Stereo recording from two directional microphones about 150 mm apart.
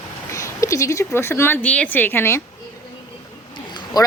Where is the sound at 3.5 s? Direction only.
30° left (ahead or behind).